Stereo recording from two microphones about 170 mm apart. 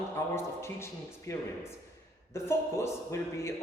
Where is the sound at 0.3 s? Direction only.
15° left (ahead or behind).